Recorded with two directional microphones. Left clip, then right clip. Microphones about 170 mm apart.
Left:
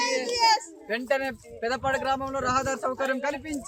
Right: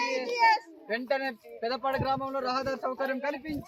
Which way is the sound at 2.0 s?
15° left (ahead or behind).